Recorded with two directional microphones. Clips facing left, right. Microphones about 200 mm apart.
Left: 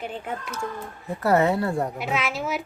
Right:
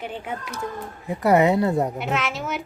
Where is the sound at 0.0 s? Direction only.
5° right (ahead or behind).